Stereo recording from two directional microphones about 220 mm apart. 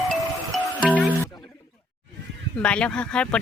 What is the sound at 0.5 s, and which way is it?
Music, centre (ahead or behind).